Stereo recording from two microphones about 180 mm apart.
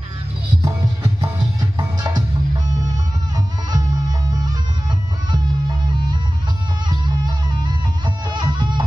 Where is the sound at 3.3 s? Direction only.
20° right (ahead or behind).